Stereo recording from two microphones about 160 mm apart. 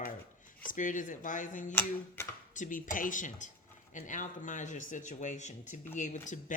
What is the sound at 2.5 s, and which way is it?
Speech, 55° left (ahead or behind).